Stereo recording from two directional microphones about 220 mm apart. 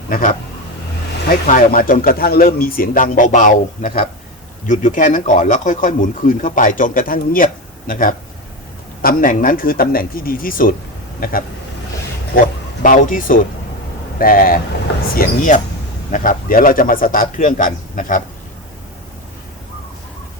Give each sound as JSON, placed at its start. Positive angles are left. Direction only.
{"t": 0.1, "sound": "speech", "side_deg": 35}
{"t": 1.5, "sound": "speech", "side_deg": 40}
{"t": 12.8, "sound": "speech", "side_deg": 40}